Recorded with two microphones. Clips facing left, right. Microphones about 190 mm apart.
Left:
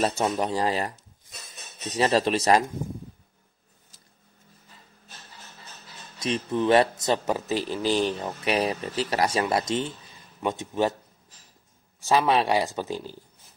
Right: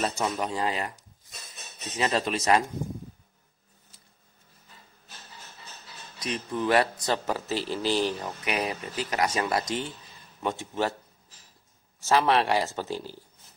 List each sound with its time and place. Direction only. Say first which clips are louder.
0.0 s speech: left 4 dB; 35° left (ahead or behind)
6.1 s speech: left 5 dB; 25° left (ahead or behind)
12.0 s speech: left 1 dB; 15° left (ahead or behind)